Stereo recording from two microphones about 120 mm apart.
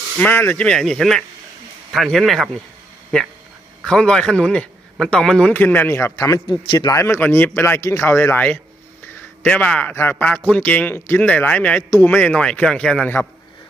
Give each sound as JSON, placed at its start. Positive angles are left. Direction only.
{"t": 0.2, "sound": "a man's voice", "side_deg": 15}
{"t": 3.8, "sound": "a man's voice", "side_deg": 10}
{"t": 7.2, "sound": "a man's voice", "side_deg": 15}